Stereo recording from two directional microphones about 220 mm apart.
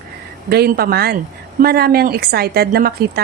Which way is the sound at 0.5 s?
45° right (ahead or behind).